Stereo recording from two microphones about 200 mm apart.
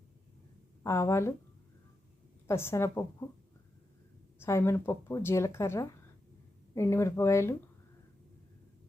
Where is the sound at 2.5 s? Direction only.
10° left (ahead or behind).